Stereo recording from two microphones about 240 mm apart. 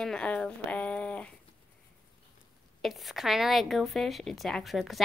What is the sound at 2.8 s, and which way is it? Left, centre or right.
Speech, centre.